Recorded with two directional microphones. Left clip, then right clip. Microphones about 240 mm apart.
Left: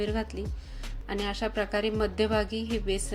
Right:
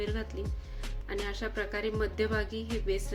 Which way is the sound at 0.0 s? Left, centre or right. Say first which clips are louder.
Left 4 dB; centre.